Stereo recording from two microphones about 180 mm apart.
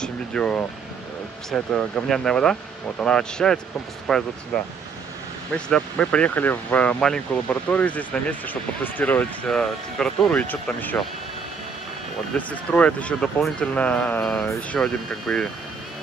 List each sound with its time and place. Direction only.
0.0 s air conditioning: 5° left (ahead or behind)
1.5 s speech: 5° left (ahead or behind)
5.5 s speech: 5° left (ahead or behind)
12.4 s speech: 10° left (ahead or behind)